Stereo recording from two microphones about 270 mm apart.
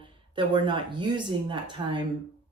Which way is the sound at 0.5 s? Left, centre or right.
Centre.